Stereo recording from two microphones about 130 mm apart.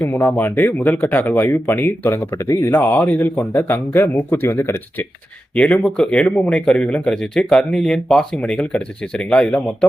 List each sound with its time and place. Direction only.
0.0 s speech: 15° left (ahead or behind)
2.7 s speech: 15° left (ahead or behind)